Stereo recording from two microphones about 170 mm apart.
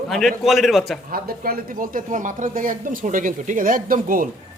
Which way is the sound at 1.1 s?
60° right (ahead or behind).